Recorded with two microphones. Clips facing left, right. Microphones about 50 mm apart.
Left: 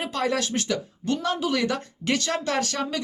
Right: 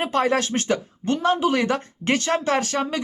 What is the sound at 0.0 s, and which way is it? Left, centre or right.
Speech, right.